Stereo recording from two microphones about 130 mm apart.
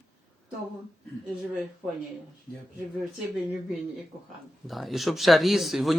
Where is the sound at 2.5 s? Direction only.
10° left (ahead or behind).